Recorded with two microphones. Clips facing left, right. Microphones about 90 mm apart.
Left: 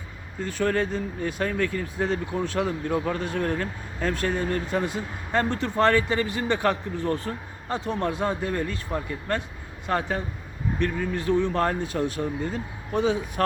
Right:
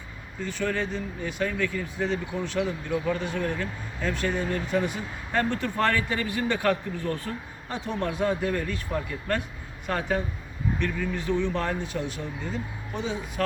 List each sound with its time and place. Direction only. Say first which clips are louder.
0.4 s speech: left 4 dB; 45° left (ahead or behind)